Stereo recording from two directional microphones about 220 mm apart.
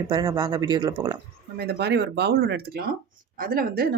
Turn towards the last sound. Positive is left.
turn(degrees=-40)  # may be behind; listen again after turning